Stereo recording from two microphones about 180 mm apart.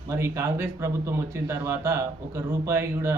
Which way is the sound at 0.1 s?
15° right (ahead or behind).